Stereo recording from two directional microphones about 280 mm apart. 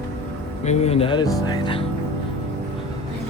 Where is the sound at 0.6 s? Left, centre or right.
Left.